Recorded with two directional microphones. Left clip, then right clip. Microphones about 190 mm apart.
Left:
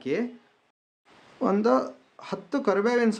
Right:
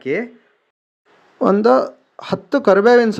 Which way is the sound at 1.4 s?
40° right (ahead or behind).